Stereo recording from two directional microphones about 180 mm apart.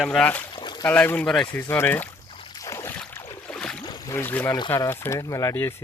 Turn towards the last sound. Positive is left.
turn(degrees=15)  # may be behind; listen again after turning